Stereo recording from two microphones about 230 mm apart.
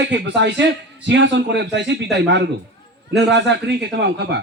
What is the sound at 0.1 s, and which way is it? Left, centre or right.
A man's voice, right.